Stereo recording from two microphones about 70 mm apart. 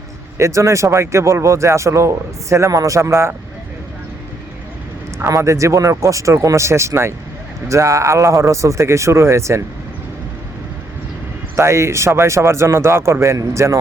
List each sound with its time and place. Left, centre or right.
0.3 s speech: right
5.3 s speech: right
11.5 s speech: right